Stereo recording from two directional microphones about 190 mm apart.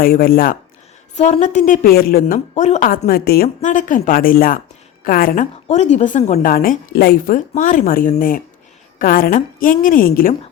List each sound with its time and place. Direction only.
0.0 s a woman's voice: 50° left (ahead or behind)
1.1 s a woman's voice: 35° left (ahead or behind); by 2.2 s 55° left (ahead or behind)
2.2 s a woman's voice: 40° left (ahead or behind)